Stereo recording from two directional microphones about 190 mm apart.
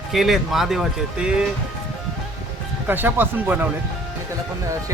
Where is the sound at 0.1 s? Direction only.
Centre (ahead or behind).